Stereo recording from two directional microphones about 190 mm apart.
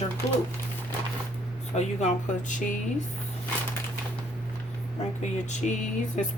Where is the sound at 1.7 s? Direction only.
35° left (ahead or behind).